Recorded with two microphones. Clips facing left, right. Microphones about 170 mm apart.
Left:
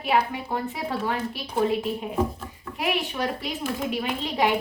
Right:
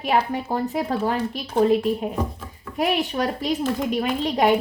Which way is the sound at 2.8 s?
40° right (ahead or behind).